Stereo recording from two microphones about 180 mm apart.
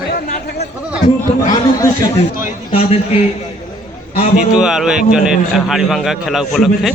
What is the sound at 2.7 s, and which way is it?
Speech, 35° left (ahead or behind).